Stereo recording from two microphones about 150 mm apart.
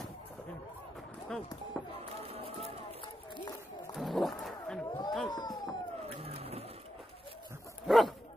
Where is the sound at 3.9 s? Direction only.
Centre (ahead or behind).